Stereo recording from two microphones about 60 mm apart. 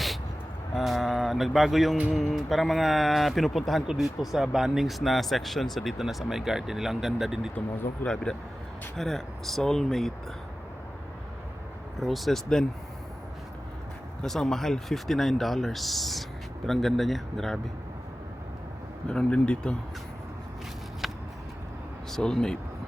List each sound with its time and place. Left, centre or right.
0.8 s mantra: centre
2.1 s speech: centre
8.0 s speech: centre
11.9 s speech: centre
14.2 s speech: centre
19.0 s speech: centre
21.0 s vehicle: centre
22.1 s speech: centre